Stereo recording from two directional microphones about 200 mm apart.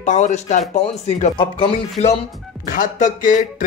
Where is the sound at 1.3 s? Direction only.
25° left (ahead or behind).